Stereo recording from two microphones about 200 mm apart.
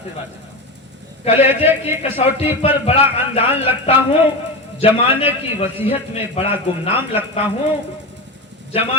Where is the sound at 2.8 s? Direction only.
30° left (ahead or behind).